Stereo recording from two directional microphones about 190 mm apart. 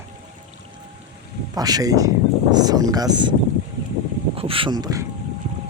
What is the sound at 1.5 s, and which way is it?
Speech, 20° right (ahead or behind).